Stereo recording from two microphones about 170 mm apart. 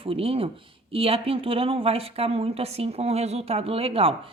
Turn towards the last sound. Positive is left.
turn(degrees=-35)  # may be behind; listen again after turning